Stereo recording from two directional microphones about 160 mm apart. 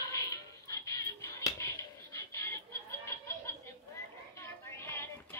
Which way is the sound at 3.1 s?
15° left (ahead or behind).